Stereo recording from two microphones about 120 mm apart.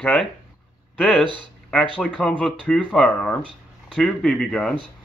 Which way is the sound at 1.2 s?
40° right (ahead or behind).